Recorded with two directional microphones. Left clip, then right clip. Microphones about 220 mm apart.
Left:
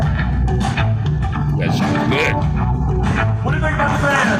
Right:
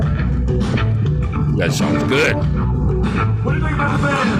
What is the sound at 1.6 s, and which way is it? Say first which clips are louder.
Speech: right 1 dB; 25° right (ahead or behind).